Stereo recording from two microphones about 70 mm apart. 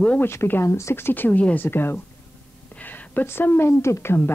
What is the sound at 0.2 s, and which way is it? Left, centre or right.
A woman's voice, left.